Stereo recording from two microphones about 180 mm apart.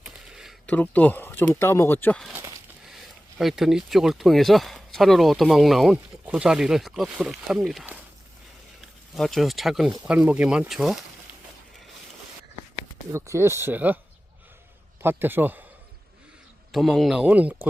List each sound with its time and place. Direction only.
0.0 s a sound: 5° right (ahead or behind)
0.7 s speech: 10° left (ahead or behind)
2.3 s a sound: 20° right (ahead or behind)
2.9 s speech: 5° right (ahead or behind)
9.1 s speech: centre (ahead or behind)
13.1 s speech: 15° right (ahead or behind)
15.0 s speech: 10° right (ahead or behind)
16.7 s speech: centre (ahead or behind)